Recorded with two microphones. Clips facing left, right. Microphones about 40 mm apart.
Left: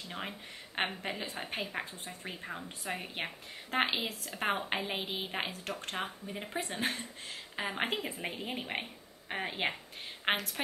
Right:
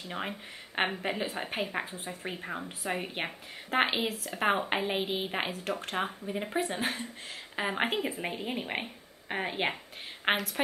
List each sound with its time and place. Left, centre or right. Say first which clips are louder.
0.1 s speech: right 5 dB; centre